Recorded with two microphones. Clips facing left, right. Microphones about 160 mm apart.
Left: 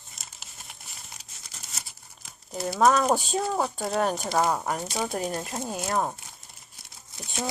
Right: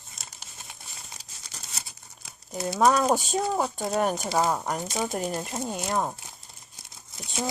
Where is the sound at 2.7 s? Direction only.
5° right (ahead or behind).